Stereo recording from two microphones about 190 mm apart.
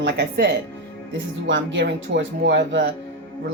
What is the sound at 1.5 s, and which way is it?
A woman's voice, 75° right (ahead or behind).